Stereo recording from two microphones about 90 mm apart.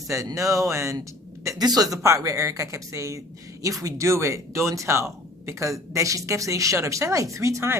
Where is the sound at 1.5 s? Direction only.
45° right (ahead or behind).